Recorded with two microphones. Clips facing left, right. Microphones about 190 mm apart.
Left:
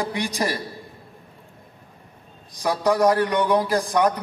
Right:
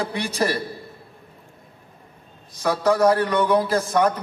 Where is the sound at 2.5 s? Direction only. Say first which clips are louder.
Right 1 dB; 15° left (ahead or behind).